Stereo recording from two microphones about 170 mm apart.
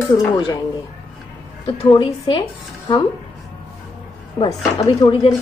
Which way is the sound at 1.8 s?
25° left (ahead or behind).